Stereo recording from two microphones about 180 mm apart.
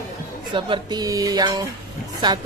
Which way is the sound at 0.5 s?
25° right (ahead or behind).